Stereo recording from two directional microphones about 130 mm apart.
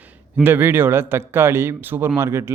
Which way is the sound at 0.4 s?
15° right (ahead or behind).